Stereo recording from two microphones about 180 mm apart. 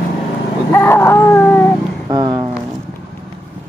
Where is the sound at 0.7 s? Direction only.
15° left (ahead or behind).